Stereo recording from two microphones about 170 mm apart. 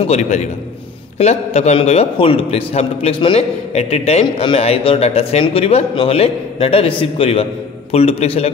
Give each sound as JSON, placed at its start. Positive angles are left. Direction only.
{"t": 0.0, "sound": "a man's voice", "side_deg": 40}